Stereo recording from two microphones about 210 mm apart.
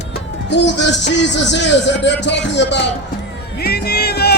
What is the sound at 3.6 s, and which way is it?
Music, 50° left (ahead or behind).